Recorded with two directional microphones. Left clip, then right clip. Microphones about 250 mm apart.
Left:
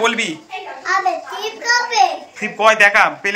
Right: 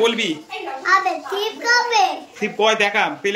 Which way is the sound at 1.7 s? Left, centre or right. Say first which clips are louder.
Left 2 dB; centre.